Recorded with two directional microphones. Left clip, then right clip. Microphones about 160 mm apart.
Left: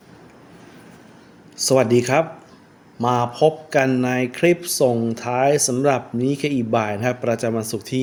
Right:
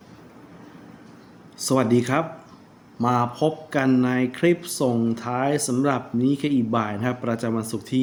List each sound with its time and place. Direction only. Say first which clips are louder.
1.6 s speech: left 5 dB; 35° left (ahead or behind)